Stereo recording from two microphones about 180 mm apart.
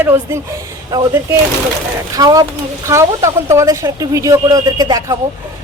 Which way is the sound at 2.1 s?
20° right (ahead or behind).